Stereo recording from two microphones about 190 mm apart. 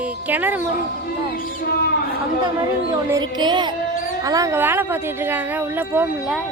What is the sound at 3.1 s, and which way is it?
Music, 25° right (ahead or behind).